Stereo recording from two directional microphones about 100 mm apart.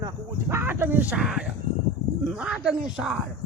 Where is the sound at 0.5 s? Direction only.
25° right (ahead or behind).